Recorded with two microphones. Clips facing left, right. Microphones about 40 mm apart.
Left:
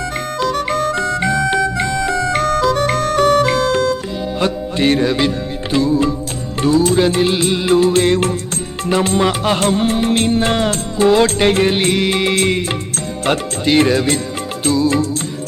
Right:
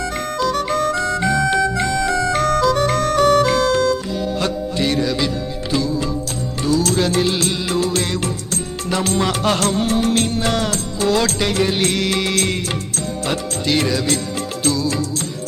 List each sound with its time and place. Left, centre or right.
0.3 s music: left; by 9.6 s centre
9.6 s music: left
13.7 s music: left